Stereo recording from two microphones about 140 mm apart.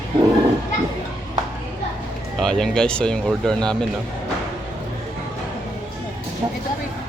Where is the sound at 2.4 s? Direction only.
5° left (ahead or behind).